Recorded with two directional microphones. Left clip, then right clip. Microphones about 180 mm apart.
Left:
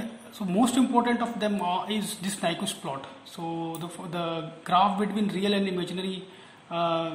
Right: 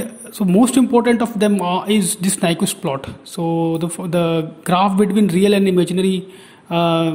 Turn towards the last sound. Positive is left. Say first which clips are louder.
# right 10 dB
turn(degrees=-45)  # may be behind; listen again after turning